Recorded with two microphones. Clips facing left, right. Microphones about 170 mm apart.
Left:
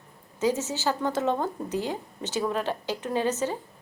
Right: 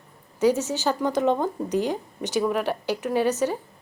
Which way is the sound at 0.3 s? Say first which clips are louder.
Right 5 dB; 20° left (ahead or behind).